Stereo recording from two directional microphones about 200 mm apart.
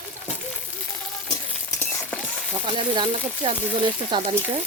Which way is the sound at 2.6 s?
25° right (ahead or behind).